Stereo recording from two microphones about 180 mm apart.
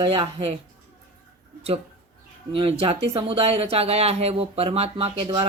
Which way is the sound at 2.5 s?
30° right (ahead or behind).